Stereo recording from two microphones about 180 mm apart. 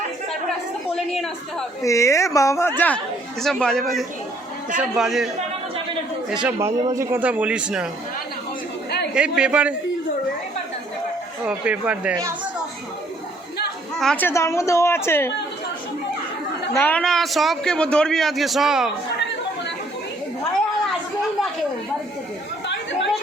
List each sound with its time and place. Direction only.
0.9 s a man's voice: centre (ahead or behind)
1.8 s a woman's voice: 15° left (ahead or behind); by 5.3 s centre (ahead or behind)
6.3 s a man's voice: 5° right (ahead or behind)
6.7 s a man's voice: 15° right (ahead or behind)
9.1 s a man's voice: 5° right (ahead or behind)
11.4 s a man's voice: 5° right (ahead or behind)
14.0 s a woman's voice: 5° left (ahead or behind)
16.7 s a man's voice: 10° left (ahead or behind)
22.6 s chatter: 80° left